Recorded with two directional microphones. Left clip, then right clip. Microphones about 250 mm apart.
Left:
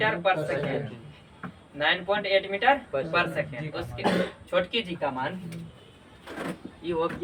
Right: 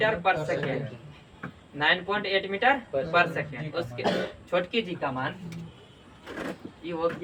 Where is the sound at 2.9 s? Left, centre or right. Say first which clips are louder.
Even; left.